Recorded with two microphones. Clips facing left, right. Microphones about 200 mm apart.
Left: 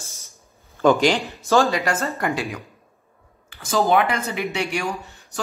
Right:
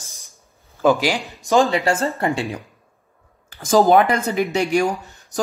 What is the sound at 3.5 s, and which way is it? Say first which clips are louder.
Speech: right 5 dB; 40° right (ahead or behind).